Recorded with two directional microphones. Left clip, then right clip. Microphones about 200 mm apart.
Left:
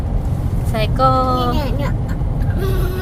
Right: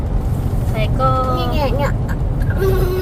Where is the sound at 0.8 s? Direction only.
40° left (ahead or behind).